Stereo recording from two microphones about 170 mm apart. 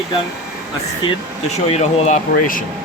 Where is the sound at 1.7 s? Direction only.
35° left (ahead or behind).